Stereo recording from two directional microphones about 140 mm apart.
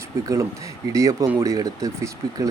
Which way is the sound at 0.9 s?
25° right (ahead or behind).